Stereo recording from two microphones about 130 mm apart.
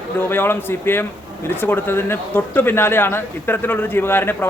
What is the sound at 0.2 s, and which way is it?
Speech, 15° left (ahead or behind).